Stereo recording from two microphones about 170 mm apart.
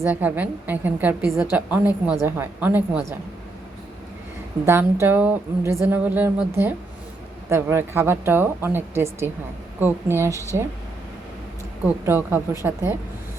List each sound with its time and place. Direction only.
0.0 s speech: 10° right (ahead or behind)
4.6 s speech: 15° right (ahead or behind)
12.0 s speech: 10° right (ahead or behind)